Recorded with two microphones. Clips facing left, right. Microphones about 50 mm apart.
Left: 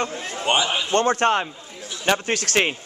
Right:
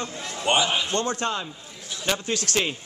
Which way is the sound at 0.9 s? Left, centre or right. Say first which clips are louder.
Left 7 dB; left.